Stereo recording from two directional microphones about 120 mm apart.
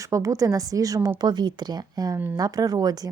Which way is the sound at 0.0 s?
25° right (ahead or behind).